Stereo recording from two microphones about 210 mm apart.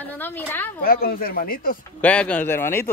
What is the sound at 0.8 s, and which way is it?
Speech, 45° left (ahead or behind).